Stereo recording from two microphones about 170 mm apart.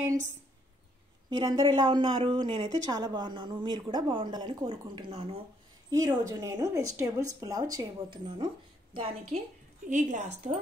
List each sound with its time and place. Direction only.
1.3 s speech: 25° right (ahead or behind)
5.9 s a woman's voice: 20° right (ahead or behind)
9.8 s a woman's voice: 45° right (ahead or behind)